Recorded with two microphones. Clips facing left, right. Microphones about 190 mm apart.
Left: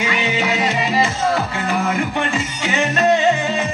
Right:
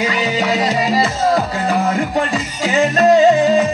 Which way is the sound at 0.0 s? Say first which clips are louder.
Right 3 dB; 35° right (ahead or behind).